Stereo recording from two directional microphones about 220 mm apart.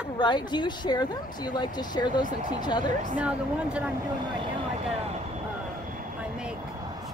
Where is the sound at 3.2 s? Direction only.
5° right (ahead or behind).